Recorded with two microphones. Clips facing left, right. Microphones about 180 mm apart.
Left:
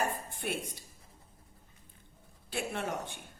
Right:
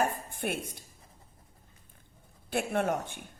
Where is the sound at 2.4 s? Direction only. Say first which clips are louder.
Right 6 dB; 55° right (ahead or behind).